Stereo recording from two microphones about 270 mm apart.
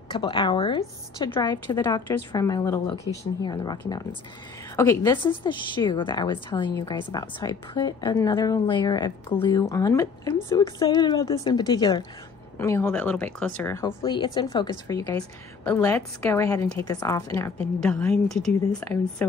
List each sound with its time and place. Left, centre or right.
0.1 s a woman's voice: centre